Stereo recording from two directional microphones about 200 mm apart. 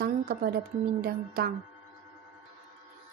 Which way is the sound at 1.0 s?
50° right (ahead or behind).